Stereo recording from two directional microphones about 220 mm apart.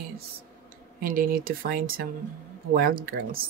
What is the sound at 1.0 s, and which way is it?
Speech, 40° right (ahead or behind).